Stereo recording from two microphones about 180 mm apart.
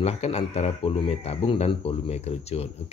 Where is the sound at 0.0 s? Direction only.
35° left (ahead or behind).